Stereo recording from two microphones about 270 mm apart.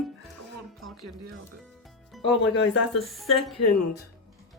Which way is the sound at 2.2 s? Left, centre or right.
Left.